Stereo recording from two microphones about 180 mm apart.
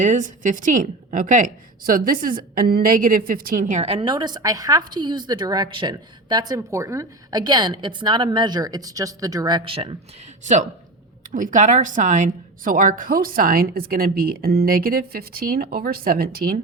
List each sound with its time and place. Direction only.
0.0 s a woman's voice: 45° right (ahead or behind)
10.4 s a woman's voice: 40° right (ahead or behind)